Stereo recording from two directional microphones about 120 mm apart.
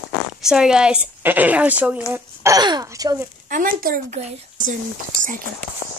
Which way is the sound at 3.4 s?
90° right.